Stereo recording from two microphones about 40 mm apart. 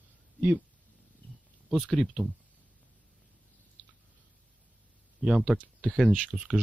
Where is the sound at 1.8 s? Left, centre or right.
Left.